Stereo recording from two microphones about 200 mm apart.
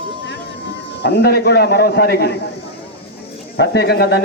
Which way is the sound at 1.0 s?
55° left (ahead or behind).